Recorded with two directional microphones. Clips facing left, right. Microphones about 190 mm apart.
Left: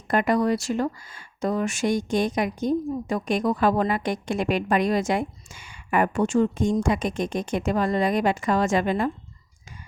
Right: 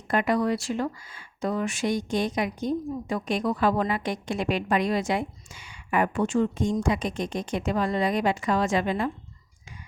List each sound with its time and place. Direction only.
0.1 s speech: 45° left (ahead or behind)